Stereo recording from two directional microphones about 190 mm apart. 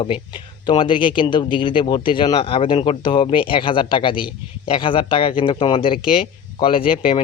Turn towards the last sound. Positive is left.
turn(degrees=30)  # may be behind; listen again after turning